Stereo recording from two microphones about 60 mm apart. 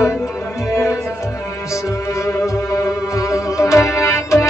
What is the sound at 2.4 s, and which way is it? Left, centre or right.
Music, left.